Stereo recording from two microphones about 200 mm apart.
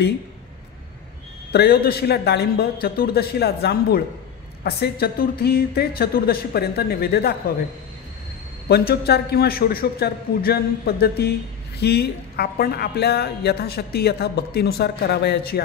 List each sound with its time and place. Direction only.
1.5 s a woman's voice: 50° left (ahead or behind)
8.6 s a woman's voice: 50° left (ahead or behind)